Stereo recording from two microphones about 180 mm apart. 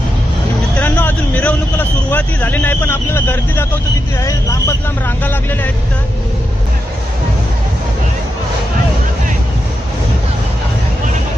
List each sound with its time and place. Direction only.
0.8 s vehicle: 10° left (ahead or behind)
4.2 s speech: 20° left (ahead or behind)